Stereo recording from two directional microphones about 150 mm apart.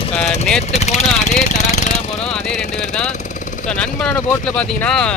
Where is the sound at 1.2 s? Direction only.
50° left (ahead or behind).